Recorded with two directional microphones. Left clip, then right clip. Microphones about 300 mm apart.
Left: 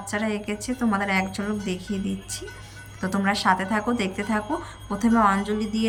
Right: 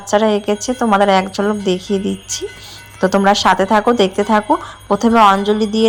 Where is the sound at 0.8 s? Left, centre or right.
Right.